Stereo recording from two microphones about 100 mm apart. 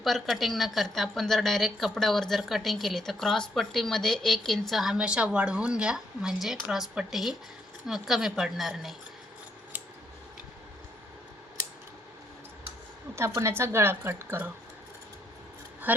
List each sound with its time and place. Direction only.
0.0 s a woman's voice: centre (ahead or behind)
13.1 s a woman's voice: 30° right (ahead or behind)
15.9 s speech: 15° right (ahead or behind)